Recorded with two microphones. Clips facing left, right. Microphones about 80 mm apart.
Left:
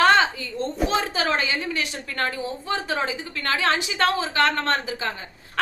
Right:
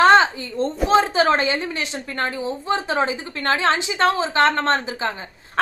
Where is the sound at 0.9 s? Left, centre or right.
Right.